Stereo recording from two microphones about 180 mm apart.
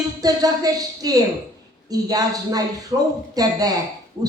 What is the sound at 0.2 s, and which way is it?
Speech, 20° right (ahead or behind).